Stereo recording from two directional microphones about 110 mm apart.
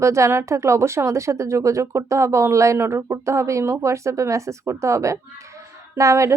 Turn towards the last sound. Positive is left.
turn(degrees=-30)  # may be behind; listen again after turning